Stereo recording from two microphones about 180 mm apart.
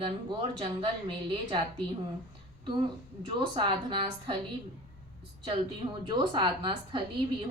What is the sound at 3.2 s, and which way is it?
Speech, 25° right (ahead or behind).